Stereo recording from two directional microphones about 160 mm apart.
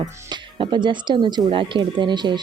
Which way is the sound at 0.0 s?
30° right (ahead or behind).